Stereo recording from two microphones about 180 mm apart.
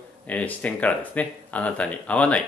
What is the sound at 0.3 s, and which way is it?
Speech, 10° left (ahead or behind).